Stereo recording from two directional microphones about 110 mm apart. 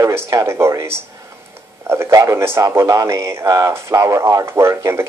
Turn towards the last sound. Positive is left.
turn(degrees=-25)  # may be behind; listen again after turning